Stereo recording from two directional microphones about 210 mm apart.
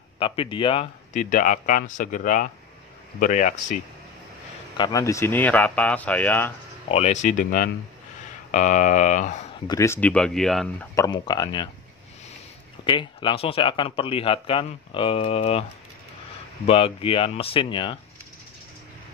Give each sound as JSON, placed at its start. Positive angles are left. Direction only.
{"t": 0.2, "sound": "speech", "side_deg": 25}
{"t": 1.1, "sound": "speech", "side_deg": 40}
{"t": 4.7, "sound": "speech", "side_deg": 20}
{"t": 6.9, "sound": "speech", "side_deg": 30}
{"t": 9.7, "sound": "speech", "side_deg": 15}
{"t": 11.0, "sound": "speech", "side_deg": 20}
{"t": 12.8, "sound": "speech", "side_deg": 25}
{"t": 16.6, "sound": "speech", "side_deg": 25}